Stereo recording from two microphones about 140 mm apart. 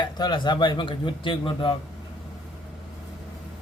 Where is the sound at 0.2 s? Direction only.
35° left (ahead or behind).